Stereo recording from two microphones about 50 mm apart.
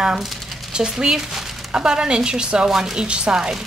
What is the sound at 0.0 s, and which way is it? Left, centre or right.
Speech, centre.